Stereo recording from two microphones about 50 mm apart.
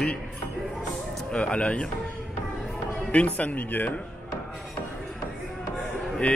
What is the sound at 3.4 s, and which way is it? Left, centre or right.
Speech, left.